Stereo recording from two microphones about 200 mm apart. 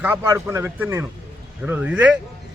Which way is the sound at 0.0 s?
10° right (ahead or behind).